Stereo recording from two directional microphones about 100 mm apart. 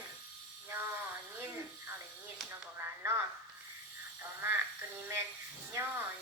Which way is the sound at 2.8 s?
20° right (ahead or behind).